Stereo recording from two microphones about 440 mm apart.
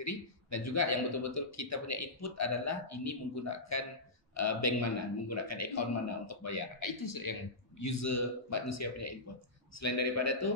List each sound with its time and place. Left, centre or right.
0.0 s speech: left